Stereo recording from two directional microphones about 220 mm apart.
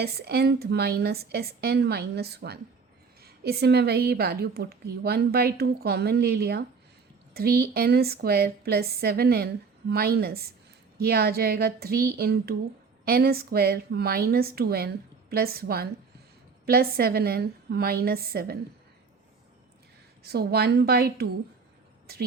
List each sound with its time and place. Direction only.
0.0 s a woman's voice: 45° right (ahead or behind)
20.2 s a woman's voice: 45° right (ahead or behind)